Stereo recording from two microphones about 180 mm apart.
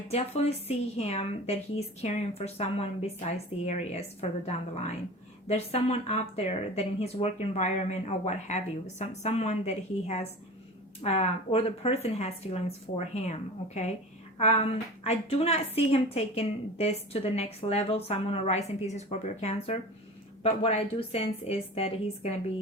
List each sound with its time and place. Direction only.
0.1 s speech: 35° left (ahead or behind)
14.3 s speech: 35° left (ahead or behind)